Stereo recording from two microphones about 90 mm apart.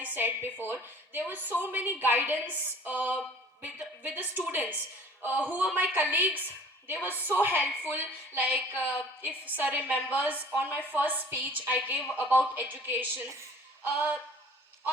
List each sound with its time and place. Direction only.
0.0 s a woman's voice: 20° right (ahead or behind)